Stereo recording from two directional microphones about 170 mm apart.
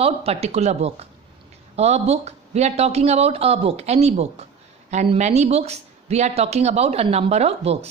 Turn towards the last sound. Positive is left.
turn(degrees=-35)  # may be behind; listen again after turning